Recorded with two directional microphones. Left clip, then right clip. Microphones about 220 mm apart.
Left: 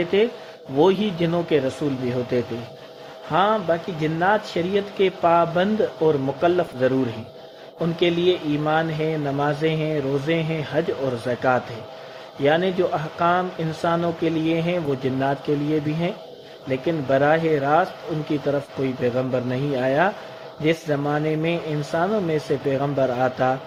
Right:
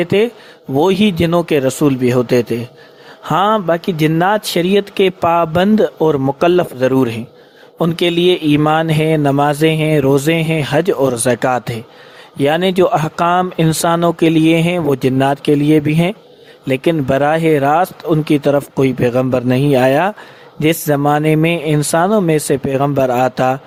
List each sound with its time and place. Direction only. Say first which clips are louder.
0.0 s speech: right 6 dB; 45° right (ahead or behind)